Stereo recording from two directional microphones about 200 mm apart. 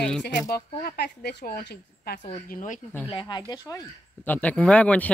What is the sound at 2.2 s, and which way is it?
Speech, 40° left (ahead or behind).